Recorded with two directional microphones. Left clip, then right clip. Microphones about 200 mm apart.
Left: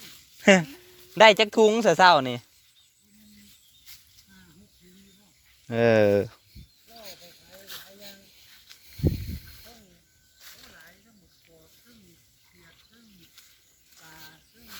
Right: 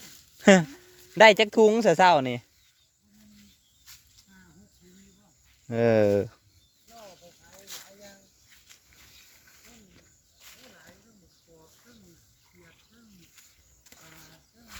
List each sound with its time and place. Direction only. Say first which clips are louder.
0.3 s a sound: even; 20° right (ahead or behind)
1.1 s speech: even; 15° right (ahead or behind)
5.6 s speech: left 2 dB; centre (ahead or behind)
10.4 s snake: left 3 dB; centre (ahead or behind)